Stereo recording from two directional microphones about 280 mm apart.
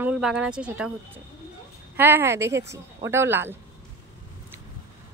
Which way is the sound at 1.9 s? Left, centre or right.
Centre.